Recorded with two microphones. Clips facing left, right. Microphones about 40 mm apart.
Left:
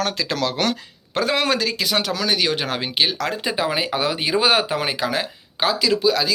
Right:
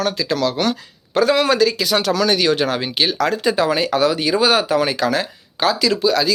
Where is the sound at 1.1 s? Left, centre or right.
Left.